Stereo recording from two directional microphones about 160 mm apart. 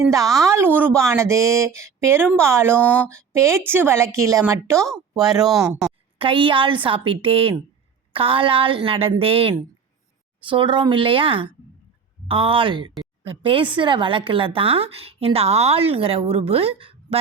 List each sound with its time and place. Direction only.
0.1 s a woman's voice: 20° right (ahead or behind)
2.7 s speech: 10° left (ahead or behind)
3.1 s a woman's voice: 15° right (ahead or behind)
4.9 s speech: centre (ahead or behind)
6.1 s speech: 35° right (ahead or behind)